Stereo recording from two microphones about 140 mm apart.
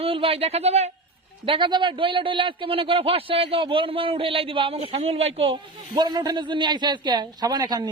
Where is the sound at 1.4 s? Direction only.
35° right (ahead or behind).